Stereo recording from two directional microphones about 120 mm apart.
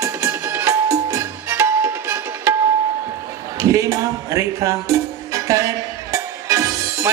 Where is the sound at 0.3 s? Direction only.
20° right (ahead or behind).